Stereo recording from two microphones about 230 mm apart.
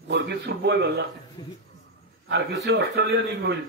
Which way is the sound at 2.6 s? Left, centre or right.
Right.